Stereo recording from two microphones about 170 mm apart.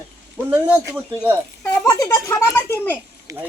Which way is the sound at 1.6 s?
20° left (ahead or behind).